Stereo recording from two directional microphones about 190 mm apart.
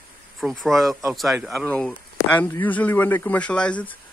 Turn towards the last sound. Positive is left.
turn(degrees=10)  # may be behind; listen again after turning